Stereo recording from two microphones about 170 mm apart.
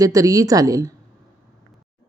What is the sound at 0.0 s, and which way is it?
Speech, 20° right (ahead or behind).